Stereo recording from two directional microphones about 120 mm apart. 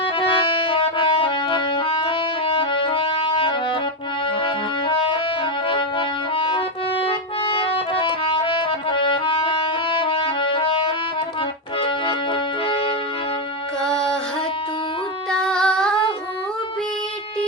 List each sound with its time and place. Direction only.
0.0 s music: 45° left (ahead or behind)
13.8 s music: 5° left (ahead or behind)
15.3 s humming: 5° left (ahead or behind)